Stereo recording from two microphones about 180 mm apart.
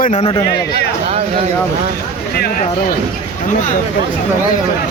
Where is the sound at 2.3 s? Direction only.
60° left (ahead or behind).